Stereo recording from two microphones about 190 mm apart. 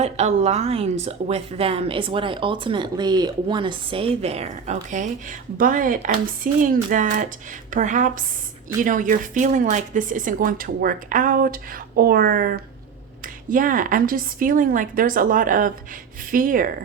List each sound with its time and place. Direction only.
0.0 s a woman's voice: 35° right (ahead or behind)